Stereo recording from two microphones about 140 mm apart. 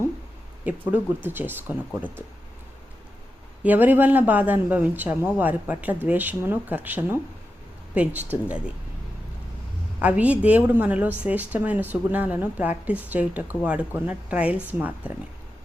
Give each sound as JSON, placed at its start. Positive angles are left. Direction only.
{"t": 0.6, "sound": "a woman's voice", "side_deg": -10}
{"t": 3.6, "sound": "a woman's voice", "side_deg": -10}
{"t": 10.0, "sound": "a woman's voice", "side_deg": -10}